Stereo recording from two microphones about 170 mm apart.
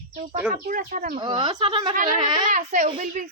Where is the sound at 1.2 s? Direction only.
30° right (ahead or behind).